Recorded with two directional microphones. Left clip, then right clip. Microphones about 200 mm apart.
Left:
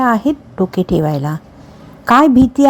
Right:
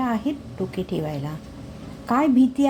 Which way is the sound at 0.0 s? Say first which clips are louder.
Left 12 dB; 40° left (ahead or behind).